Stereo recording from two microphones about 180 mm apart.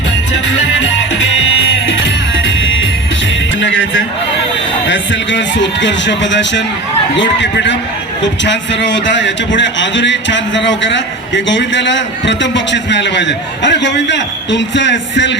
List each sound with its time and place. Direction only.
3.6 s music: 90° left
4.9 s a man's voice: 90° left